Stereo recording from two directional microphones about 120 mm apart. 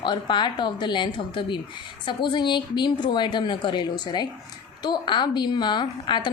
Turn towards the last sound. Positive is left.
turn(degrees=40)  # may be behind; listen again after turning